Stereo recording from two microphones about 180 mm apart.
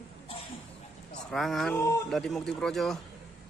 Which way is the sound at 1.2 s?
Centre (ahead or behind).